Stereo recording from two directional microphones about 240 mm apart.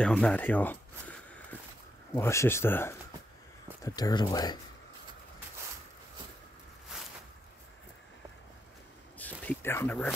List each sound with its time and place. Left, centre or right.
0.0 s a sound: centre
2.1 s speech: centre
9.2 s speech: centre